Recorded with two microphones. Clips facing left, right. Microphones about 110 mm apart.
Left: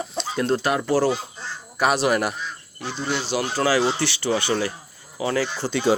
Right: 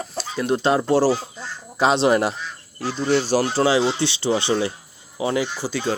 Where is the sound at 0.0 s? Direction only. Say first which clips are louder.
Left 1 dB; centre (ahead or behind).